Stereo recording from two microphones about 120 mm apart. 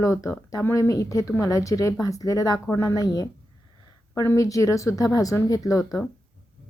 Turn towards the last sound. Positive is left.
turn(degrees=30)  # may be behind; listen again after turning